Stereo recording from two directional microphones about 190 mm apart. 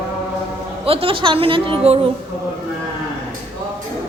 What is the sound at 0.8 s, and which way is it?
Speech, 30° right (ahead or behind).